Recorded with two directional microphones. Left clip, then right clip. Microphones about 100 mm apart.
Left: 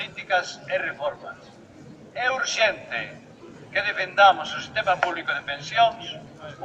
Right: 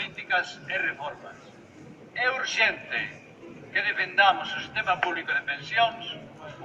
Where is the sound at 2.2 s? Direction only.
35° left (ahead or behind).